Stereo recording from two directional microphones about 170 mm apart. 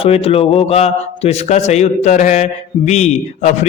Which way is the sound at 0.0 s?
35° left (ahead or behind).